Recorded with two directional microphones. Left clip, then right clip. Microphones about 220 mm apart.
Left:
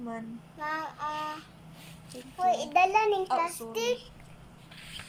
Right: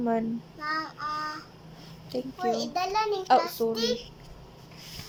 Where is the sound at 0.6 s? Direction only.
10° left (ahead or behind).